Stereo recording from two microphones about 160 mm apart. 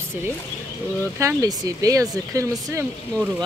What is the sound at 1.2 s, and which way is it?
Speech, 20° right (ahead or behind).